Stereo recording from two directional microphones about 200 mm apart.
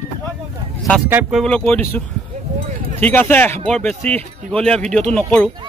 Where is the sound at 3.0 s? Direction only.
10° left (ahead or behind).